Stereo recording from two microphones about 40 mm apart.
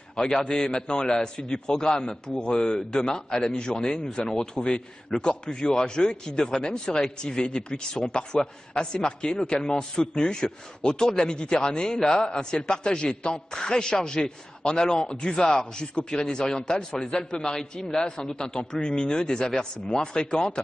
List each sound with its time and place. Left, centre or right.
0.1 s a man's voice: centre